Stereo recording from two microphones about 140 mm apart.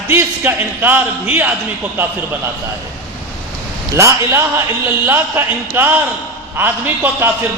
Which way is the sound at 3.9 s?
20° right (ahead or behind).